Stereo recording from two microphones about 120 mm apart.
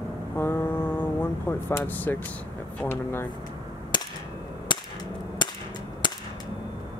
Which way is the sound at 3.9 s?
40° left (ahead or behind).